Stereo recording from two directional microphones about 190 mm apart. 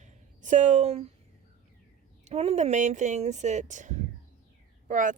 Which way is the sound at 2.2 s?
35° right (ahead or behind).